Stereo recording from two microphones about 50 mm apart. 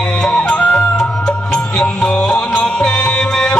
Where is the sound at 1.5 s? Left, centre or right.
Centre.